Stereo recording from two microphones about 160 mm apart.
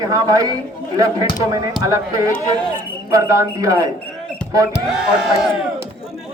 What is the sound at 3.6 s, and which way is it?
Speech, 20° right (ahead or behind).